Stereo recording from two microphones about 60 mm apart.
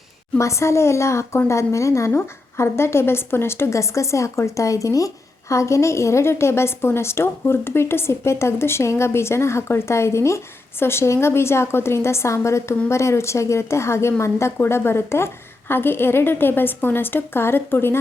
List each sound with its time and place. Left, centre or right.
0.3 s a woman's voice: left